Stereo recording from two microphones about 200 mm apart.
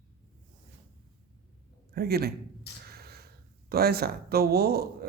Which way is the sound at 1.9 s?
50° right (ahead or behind).